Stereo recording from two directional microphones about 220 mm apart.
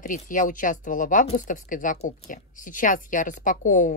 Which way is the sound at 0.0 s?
35° left (ahead or behind).